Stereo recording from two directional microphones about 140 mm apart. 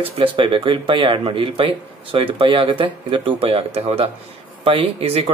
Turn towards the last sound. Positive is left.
turn(degrees=-45)  # may be behind; listen again after turning